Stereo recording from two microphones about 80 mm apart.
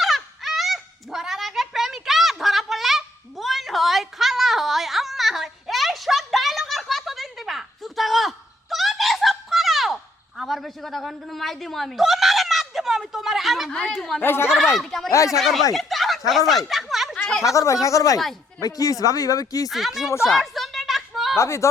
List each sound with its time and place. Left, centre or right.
0.0 s goose: centre
13.9 s speech: centre
14.2 s speech: left
14.8 s a sound: centre
15.1 s speech: left
15.4 s speech: centre
15.7 s a sound: centre
17.4 s speech: left
19.7 s speech: centre
20.2 s a sound: centre
21.3 s speech: left